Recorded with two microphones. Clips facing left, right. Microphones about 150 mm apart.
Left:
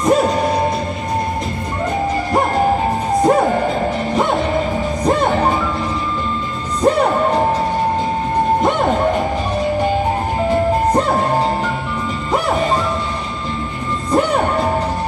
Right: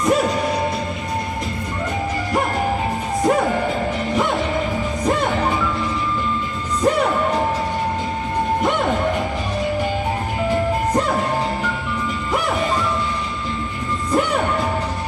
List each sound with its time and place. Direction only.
0.0 s music: 40° left (ahead or behind)
3.3 s music: 40° left (ahead or behind)
6.8 s music: 40° left (ahead or behind)
8.6 s music: 45° left (ahead or behind)
10.5 s music: 40° left (ahead or behind)
14.1 s music: 45° left (ahead or behind)